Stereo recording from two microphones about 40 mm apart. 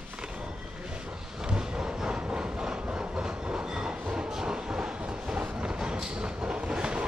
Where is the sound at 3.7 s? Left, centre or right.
Centre.